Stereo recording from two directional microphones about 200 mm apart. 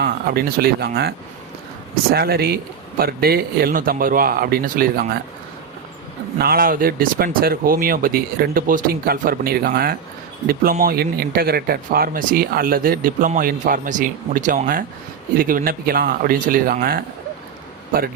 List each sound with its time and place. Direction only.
0.0 s speech: 50° right (ahead or behind)
2.1 s speech: 50° right (ahead or behind)
6.4 s speech: 45° right (ahead or behind)